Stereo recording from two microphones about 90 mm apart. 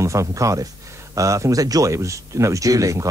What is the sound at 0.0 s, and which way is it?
A man's voice, 35° right (ahead or behind).